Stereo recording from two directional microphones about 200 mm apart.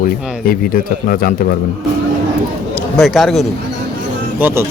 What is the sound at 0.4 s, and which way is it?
Speech, 45° left (ahead or behind).